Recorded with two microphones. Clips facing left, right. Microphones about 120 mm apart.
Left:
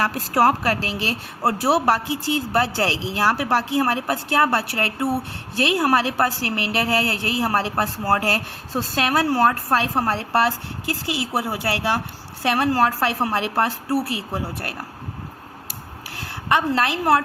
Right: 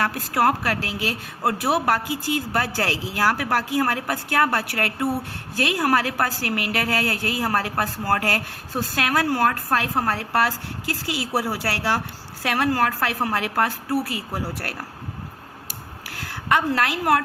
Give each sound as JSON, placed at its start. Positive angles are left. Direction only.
{"t": 0.0, "sound": "a woman's voice", "side_deg": 35}
{"t": 16.1, "sound": "a sound", "side_deg": 20}
{"t": 16.7, "sound": "a woman's voice", "side_deg": 25}